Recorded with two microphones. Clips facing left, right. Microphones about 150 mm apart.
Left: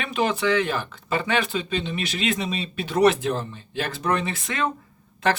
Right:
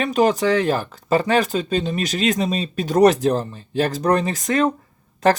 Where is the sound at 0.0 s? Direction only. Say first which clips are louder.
Right 6 dB; 40° right (ahead or behind).